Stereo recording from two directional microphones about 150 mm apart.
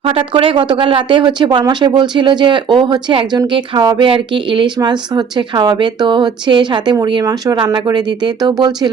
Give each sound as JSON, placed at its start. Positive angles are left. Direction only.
{"t": 0.0, "sound": "speech", "side_deg": -35}